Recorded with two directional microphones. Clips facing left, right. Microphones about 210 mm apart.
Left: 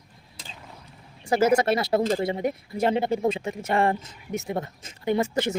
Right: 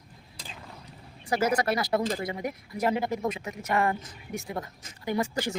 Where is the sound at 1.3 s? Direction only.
25° left (ahead or behind).